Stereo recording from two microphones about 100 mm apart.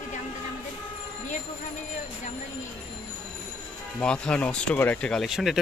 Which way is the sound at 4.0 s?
10° left (ahead or behind).